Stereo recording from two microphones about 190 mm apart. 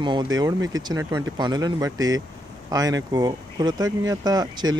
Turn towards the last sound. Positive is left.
turn(degrees=-20)  # may be behind; listen again after turning